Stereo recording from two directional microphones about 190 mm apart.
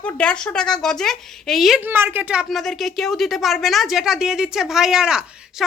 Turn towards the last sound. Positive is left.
turn(degrees=-5)  # may be behind; listen again after turning